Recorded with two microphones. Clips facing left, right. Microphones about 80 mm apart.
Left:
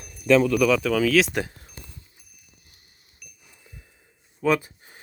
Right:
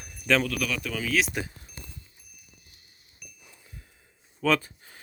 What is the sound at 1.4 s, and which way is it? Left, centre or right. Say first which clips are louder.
Speech: left 5 dB; left.